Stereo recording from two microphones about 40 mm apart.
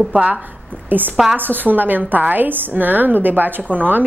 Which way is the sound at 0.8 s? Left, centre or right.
Right.